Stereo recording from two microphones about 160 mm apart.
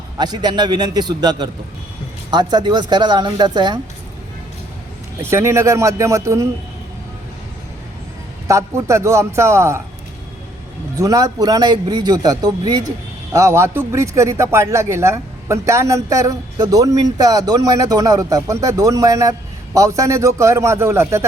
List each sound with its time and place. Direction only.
0.2 s a man's voice: 25° right (ahead or behind)
5.2 s a man's voice: 15° right (ahead or behind)
8.4 s a man's voice: 20° right (ahead or behind)
10.9 s a man's voice: 20° right (ahead or behind)